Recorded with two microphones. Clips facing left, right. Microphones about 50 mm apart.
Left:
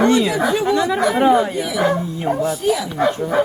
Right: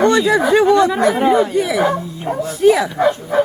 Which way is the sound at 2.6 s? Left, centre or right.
Right.